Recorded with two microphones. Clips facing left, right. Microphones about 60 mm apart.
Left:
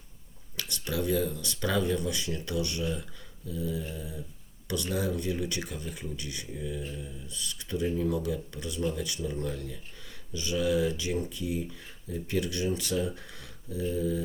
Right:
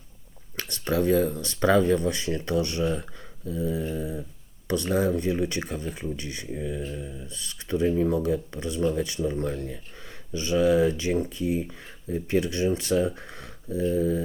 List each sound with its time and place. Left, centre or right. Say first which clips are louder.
0.5 s speech: right 7 dB; right